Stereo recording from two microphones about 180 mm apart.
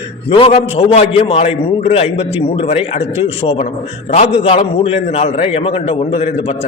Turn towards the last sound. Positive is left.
turn(degrees=35)  # may be behind; listen again after turning